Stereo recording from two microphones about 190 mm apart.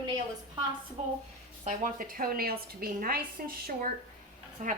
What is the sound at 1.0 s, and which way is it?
Speech, 35° right (ahead or behind).